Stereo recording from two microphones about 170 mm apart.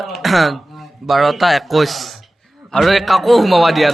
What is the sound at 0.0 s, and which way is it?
A man's voice, centre (ahead or behind).